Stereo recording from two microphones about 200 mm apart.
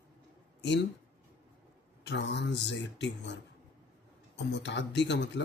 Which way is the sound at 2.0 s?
60° left (ahead or behind).